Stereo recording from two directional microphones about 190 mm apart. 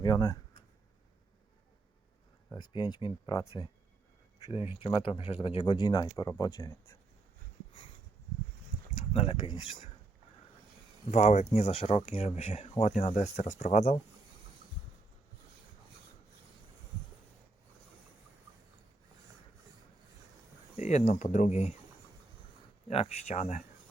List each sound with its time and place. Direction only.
0.0 s speech: 20° left (ahead or behind)
2.6 s speech: 25° left (ahead or behind)
4.4 s speech: 35° left (ahead or behind); by 6.9 s 15° left (ahead or behind)
9.1 s speech: 30° left (ahead or behind)
11.1 s speech: 35° left (ahead or behind)
20.7 s speech: 40° left (ahead or behind)
22.9 s speech: 35° left (ahead or behind)